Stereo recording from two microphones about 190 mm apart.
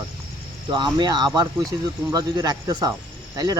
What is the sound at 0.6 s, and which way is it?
Speech, 25° right (ahead or behind).